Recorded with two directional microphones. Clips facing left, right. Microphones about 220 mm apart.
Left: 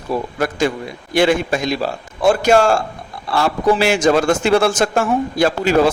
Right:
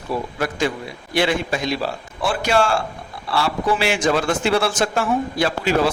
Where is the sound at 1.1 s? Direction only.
45° left (ahead or behind).